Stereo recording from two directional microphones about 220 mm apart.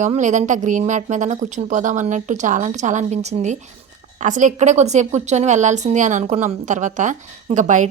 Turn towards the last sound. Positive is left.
turn(degrees=-35)  # may be behind; listen again after turning